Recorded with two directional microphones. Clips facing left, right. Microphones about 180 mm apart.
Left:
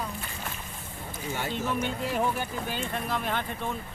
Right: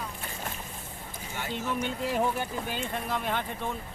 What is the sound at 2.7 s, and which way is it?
Speech, 15° right (ahead or behind).